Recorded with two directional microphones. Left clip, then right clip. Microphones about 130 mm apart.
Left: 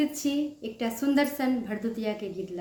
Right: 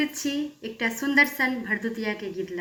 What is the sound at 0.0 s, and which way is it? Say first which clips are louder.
Female singing: even; 50° left (ahead or behind).